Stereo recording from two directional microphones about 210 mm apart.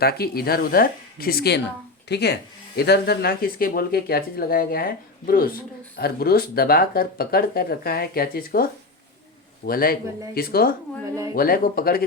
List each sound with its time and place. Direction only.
0.0 s speech: 50° left (ahead or behind)